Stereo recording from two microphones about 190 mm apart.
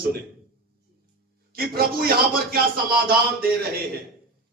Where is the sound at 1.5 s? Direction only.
50° right (ahead or behind).